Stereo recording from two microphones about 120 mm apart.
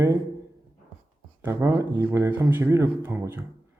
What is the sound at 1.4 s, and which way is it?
Speech, 20° right (ahead or behind).